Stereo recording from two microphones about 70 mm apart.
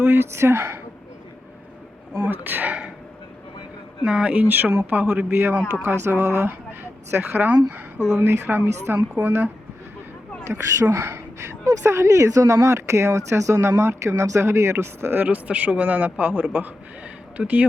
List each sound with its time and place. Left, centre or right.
0.0 s speech: right
2.1 s speech: right
4.0 s speech: centre; by 9.5 s right
10.4 s speech: right; by 17.7 s centre